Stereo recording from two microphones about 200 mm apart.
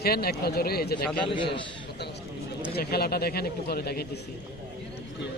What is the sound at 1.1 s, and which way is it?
Speech, 25° left (ahead or behind).